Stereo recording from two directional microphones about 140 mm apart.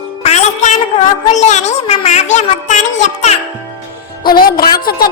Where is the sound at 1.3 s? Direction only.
55° left (ahead or behind).